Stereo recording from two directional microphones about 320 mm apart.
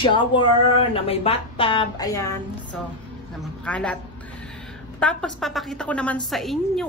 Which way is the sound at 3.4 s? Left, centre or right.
Centre.